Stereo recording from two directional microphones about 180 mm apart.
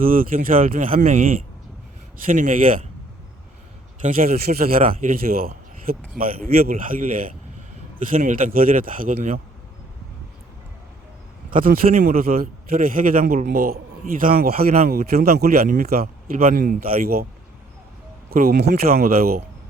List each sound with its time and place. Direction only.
0.0 s a man's voice: 50° right (ahead or behind)
0.9 s a man's voice: 40° right (ahead or behind)
4.0 s a man's voice: 50° right (ahead or behind)
11.5 s a man's voice: 50° right (ahead or behind)
18.3 s a man's voice: 55° right (ahead or behind)